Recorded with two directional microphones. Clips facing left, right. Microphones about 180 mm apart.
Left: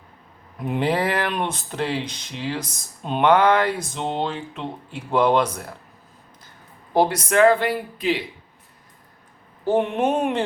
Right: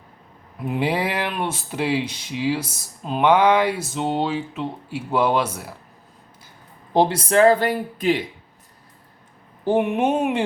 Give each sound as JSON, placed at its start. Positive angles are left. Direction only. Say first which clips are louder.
{"t": 0.6, "sound": "speech", "louder": "left 1 dB", "side_deg": -5}
{"t": 6.9, "sound": "speech", "louder": "right 1 dB", "side_deg": -25}
{"t": 9.6, "sound": "speech", "louder": "right 1 dB", "side_deg": -10}